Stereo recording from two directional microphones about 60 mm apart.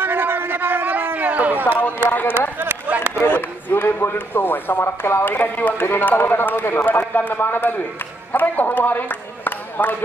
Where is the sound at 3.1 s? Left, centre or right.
Left.